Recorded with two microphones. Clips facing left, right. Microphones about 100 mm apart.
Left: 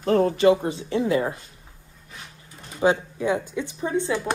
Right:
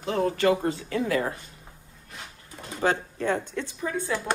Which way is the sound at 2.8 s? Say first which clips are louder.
Left 4 dB; 15° left (ahead or behind).